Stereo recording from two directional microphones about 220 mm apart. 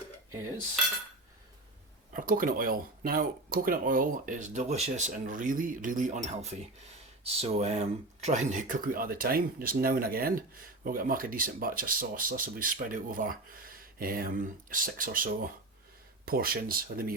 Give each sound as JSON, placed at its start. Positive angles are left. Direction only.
{"t": 2.1, "sound": "speech", "side_deg": -40}